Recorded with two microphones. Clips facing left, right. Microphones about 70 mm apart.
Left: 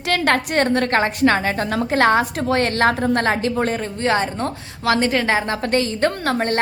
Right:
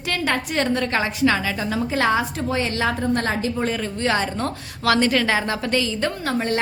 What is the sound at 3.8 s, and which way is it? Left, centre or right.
A woman's voice, left.